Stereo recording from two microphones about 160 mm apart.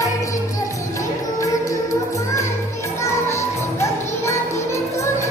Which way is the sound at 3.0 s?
20° left (ahead or behind).